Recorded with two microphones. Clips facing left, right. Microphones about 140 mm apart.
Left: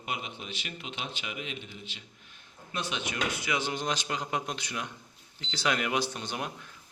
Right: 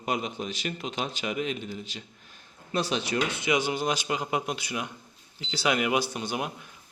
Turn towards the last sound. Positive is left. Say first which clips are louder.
# right 3 dB
turn(degrees=-10)  # may be behind; listen again after turning